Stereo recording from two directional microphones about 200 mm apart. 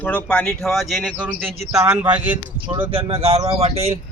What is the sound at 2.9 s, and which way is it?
Speech, 30° right (ahead or behind).